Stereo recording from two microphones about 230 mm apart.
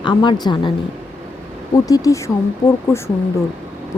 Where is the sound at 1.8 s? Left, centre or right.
Centre.